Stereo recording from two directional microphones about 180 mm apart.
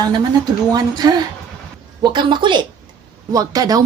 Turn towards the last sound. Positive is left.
turn(degrees=-20)  # may be behind; listen again after turning